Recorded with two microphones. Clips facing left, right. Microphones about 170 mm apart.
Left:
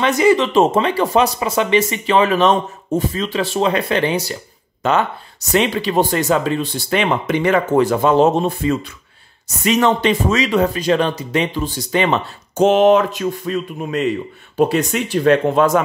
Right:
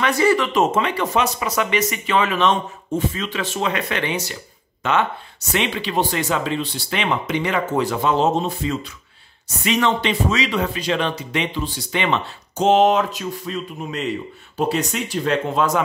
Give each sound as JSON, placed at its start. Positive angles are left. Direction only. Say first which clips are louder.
{"t": 0.0, "sound": "speech", "louder": "left 4 dB", "side_deg": 20}
{"t": 5.5, "sound": "speech", "louder": "left 6 dB", "side_deg": 40}